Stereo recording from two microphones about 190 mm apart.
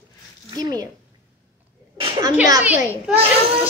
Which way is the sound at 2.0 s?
20° right (ahead or behind).